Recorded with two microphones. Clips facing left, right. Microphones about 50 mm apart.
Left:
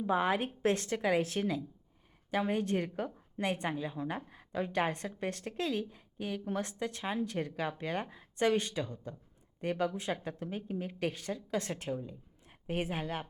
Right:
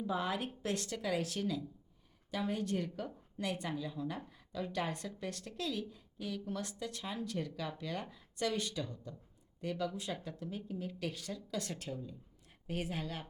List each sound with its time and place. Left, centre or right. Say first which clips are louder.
0.0 s speech: left 6 dB; left